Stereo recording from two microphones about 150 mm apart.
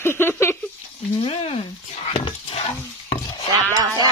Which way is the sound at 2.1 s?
40° left (ahead or behind).